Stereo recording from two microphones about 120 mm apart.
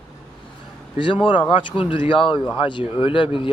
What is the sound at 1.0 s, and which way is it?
Speech, 45° left (ahead or behind).